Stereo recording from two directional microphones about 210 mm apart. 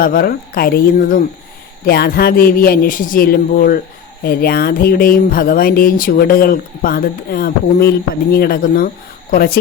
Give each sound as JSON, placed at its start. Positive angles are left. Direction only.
{"t": 0.0, "sound": "speech", "side_deg": 45}